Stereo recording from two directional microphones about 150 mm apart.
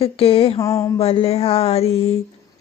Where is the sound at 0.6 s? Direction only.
20° left (ahead or behind).